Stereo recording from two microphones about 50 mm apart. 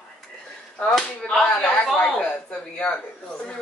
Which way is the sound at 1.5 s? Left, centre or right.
Left.